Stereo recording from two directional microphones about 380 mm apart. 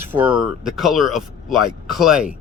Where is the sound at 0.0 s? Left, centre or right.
Centre.